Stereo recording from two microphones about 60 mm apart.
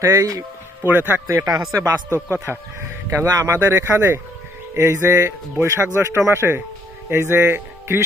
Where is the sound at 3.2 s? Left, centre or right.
Right.